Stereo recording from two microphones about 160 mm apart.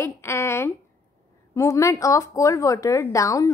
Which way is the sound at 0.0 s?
15° left (ahead or behind).